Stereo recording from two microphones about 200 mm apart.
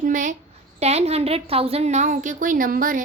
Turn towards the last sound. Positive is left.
turn(degrees=-45)  # may be behind; listen again after turning